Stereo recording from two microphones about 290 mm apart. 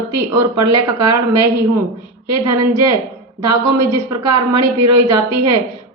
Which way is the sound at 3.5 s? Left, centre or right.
Right.